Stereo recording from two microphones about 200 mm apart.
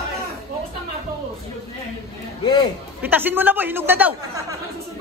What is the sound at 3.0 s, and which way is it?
Speech, 10° right (ahead or behind).